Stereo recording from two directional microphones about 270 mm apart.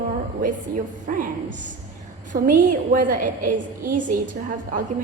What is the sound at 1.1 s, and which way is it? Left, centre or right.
A woman's voice, right.